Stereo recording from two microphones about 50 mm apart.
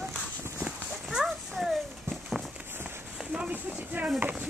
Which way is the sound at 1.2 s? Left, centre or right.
Centre.